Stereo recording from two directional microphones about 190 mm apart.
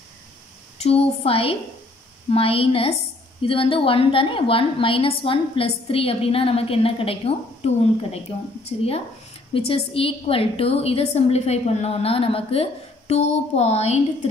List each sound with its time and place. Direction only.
0.7 s a woman's voice: 30° left (ahead or behind)